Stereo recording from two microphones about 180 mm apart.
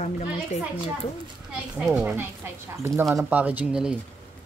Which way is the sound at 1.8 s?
5° right (ahead or behind).